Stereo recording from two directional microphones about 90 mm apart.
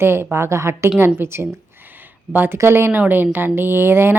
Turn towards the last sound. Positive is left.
turn(degrees=-25)  # may be behind; listen again after turning